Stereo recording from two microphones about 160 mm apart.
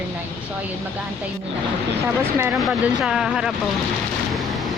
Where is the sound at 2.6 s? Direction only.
5° right (ahead or behind).